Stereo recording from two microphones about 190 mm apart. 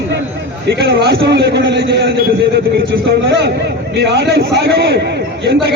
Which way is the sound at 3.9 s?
60° right (ahead or behind).